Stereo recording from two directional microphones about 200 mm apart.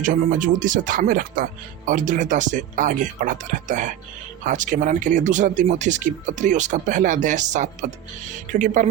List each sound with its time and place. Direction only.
0.0 s speech: 40° right (ahead or behind)